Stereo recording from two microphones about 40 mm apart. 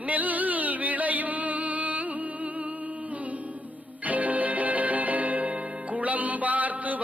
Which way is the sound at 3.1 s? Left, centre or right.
Right.